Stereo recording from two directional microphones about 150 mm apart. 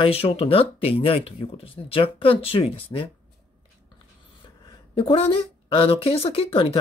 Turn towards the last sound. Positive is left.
turn(degrees=35)  # may be behind; listen again after turning